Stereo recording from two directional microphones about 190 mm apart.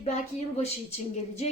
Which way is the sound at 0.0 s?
35° left (ahead or behind).